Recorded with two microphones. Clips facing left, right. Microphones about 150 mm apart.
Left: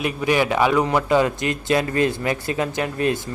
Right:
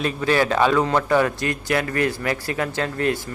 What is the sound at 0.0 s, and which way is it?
A man's voice, 15° left (ahead or behind).